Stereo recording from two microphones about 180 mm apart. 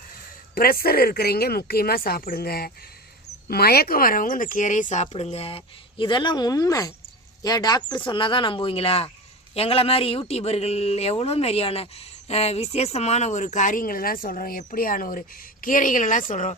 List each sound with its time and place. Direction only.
0.5 s speech: 55° left (ahead or behind)